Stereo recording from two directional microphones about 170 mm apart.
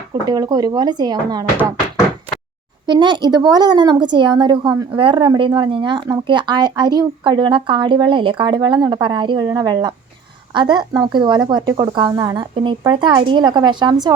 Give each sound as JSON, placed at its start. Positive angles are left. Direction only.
{"t": 0.1, "sound": "a woman's voice", "side_deg": -25}
{"t": 2.8, "sound": "a woman's voice", "side_deg": -25}